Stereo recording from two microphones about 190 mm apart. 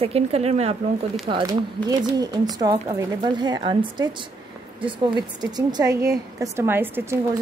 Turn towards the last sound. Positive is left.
turn(degrees=-10)  # may be behind; listen again after turning